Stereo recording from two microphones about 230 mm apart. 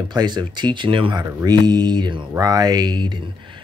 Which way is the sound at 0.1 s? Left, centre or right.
Centre.